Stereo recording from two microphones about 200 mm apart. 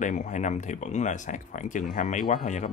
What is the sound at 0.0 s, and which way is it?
Speech, 40° left (ahead or behind).